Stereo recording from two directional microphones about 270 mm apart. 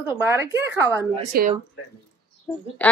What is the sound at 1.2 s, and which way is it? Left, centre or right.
Speech, right.